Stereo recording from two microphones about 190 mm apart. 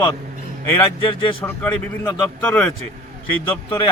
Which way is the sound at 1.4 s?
10° left (ahead or behind).